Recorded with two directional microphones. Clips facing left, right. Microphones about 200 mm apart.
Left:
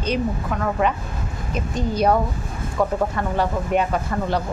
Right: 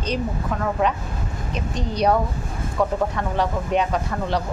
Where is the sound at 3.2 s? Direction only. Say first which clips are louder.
Left 1 dB; 5° left (ahead or behind).